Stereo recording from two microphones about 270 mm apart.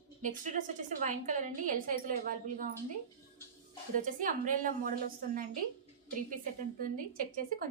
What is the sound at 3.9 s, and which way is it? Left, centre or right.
A woman's voice, right.